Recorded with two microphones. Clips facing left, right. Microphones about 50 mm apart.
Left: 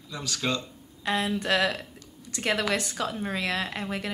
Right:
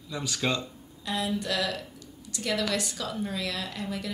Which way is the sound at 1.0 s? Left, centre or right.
Left.